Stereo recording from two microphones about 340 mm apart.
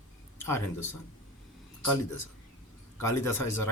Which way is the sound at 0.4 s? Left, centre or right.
Centre.